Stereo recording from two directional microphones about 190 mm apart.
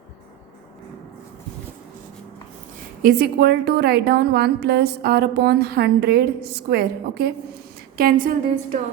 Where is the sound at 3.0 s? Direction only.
55° right (ahead or behind).